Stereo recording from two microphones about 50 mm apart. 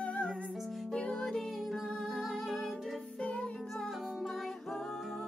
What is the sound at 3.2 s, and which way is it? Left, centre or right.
Music, centre.